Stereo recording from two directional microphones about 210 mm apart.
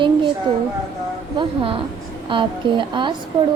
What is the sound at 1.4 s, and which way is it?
Speech, 25° right (ahead or behind).